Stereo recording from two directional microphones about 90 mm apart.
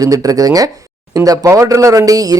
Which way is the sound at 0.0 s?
40° right (ahead or behind).